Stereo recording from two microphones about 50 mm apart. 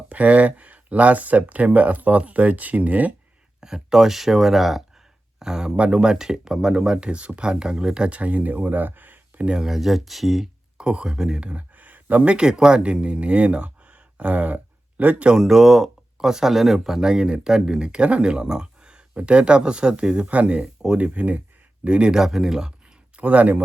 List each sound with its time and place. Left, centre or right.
0.1 s speech: right
3.6 s speech: centre; by 9.5 s right
9.5 s speech: centre
10.8 s speech: centre
15.3 s speech: centre
22.2 s speech: centre
23.1 s speech: right